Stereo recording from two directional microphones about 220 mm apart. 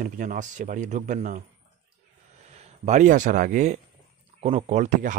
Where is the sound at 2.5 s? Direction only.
30° right (ahead or behind).